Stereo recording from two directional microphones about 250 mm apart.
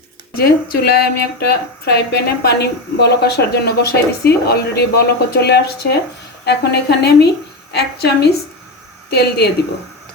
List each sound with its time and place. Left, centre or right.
0.3 s a woman's voice: left